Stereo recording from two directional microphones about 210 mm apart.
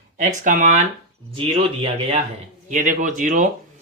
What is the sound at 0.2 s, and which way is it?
Speech, 35° right (ahead or behind).